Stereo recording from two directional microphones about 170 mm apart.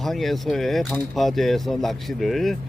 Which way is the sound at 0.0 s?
Centre (ahead or behind).